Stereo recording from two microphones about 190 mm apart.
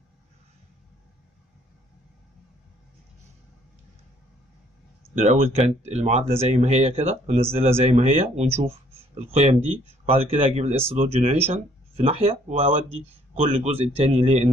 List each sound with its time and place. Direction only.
5.1 s speech: 35° right (ahead or behind)